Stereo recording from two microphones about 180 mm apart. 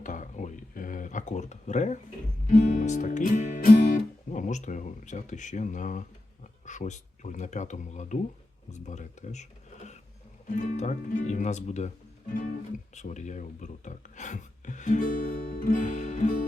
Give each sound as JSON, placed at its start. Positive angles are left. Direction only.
{"t": 0.0, "sound": "a sound", "side_deg": 45}
{"t": 2.5, "sound": "music", "side_deg": 50}
{"t": 6.7, "sound": "speech", "side_deg": 40}
{"t": 13.0, "sound": "music", "side_deg": 40}